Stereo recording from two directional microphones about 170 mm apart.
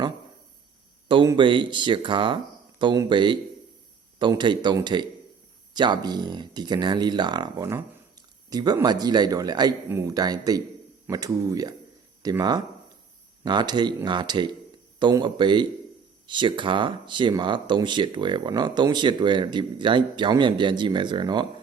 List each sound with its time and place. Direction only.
1.0 s speech: 25° right (ahead or behind)